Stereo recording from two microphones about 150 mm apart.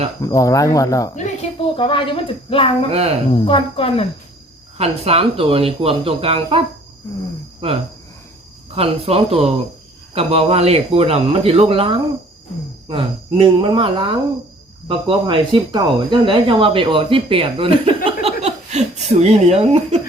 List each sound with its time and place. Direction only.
0.2 s speech: 20° left (ahead or behind)
1.1 s a woman's voice: 50° left (ahead or behind)
1.6 s speech: 35° left (ahead or behind)
2.9 s speech: 45° right (ahead or behind)
3.3 s speech: 35° left (ahead or behind)
4.8 s speech: 40° right (ahead or behind)
8.7 s speech: 40° right (ahead or behind)